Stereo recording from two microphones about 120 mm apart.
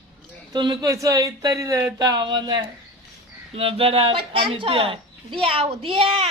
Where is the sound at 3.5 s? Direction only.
50° right (ahead or behind).